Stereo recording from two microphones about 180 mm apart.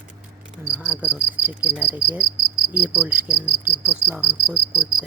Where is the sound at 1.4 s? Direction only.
10° right (ahead or behind).